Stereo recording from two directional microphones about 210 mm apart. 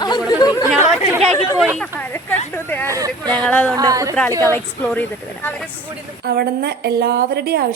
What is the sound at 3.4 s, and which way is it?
Speech, 5° left (ahead or behind).